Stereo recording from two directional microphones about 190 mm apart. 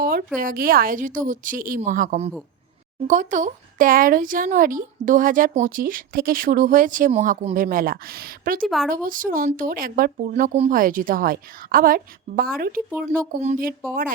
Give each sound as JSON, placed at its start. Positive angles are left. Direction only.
{"t": 0.0, "sound": "a sound", "side_deg": -50}
{"t": 0.3, "sound": "speech", "side_deg": -50}
{"t": 8.6, "sound": "speech", "side_deg": 0}
{"t": 8.9, "sound": "speech", "side_deg": -45}
{"t": 13.1, "sound": "speech", "side_deg": -35}